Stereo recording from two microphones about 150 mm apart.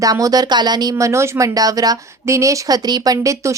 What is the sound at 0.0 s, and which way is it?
A woman's voice, 25° right (ahead or behind).